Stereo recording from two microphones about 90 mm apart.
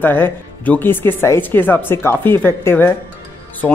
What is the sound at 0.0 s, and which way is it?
Speech, 20° left (ahead or behind).